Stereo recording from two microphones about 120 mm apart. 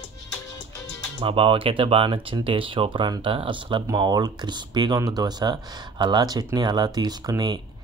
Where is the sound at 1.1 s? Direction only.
50° right (ahead or behind).